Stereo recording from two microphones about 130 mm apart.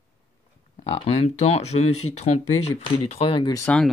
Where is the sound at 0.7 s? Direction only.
50° left (ahead or behind).